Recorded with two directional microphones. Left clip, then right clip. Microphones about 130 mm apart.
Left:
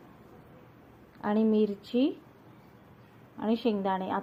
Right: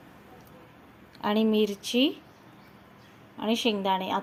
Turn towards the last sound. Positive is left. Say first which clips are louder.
# right 3 dB
turn(degrees=-15)  # may be behind; listen again after turning